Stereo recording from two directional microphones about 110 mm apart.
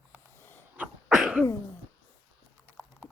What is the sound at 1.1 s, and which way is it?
Cough, 5° right (ahead or behind).